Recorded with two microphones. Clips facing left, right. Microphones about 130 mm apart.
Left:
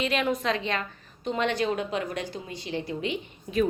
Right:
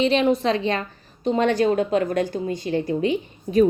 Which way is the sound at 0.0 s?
30° right (ahead or behind).